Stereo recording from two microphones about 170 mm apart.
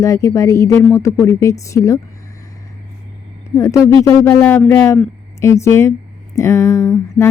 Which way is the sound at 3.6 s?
15° left (ahead or behind).